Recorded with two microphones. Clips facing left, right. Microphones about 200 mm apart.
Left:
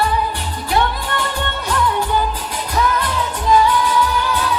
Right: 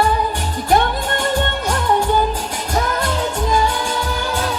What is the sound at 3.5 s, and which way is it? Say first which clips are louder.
Music: left 4 dB; 45° right (ahead or behind).